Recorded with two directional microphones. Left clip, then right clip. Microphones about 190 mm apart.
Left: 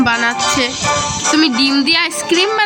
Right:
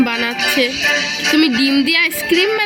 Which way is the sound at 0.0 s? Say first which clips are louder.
Left 4 dB; centre (ahead or behind).